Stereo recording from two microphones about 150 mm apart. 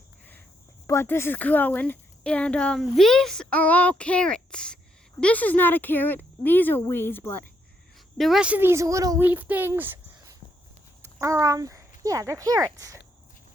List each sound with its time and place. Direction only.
0.9 s a woman's voice: 15° left (ahead or behind)
8.2 s a child's voice: 5° right (ahead or behind); by 13.0 s 20° right (ahead or behind)